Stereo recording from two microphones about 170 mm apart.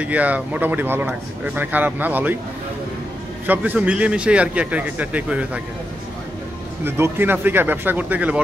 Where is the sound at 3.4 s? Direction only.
10° right (ahead or behind).